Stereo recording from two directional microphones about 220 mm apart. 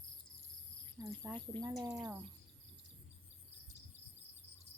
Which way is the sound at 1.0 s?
10° right (ahead or behind).